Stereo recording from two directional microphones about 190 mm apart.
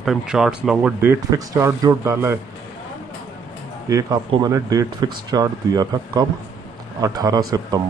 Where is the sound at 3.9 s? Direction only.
20° right (ahead or behind).